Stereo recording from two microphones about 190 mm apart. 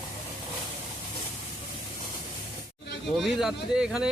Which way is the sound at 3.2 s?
Centre (ahead or behind).